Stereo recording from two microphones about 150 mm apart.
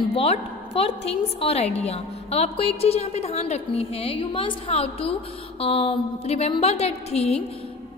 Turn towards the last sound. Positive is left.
turn(degrees=45)  # may be behind; listen again after turning